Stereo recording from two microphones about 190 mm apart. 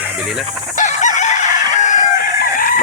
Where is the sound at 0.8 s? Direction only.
40° left (ahead or behind).